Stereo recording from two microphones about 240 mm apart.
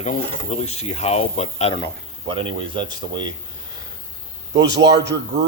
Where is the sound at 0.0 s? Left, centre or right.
Left.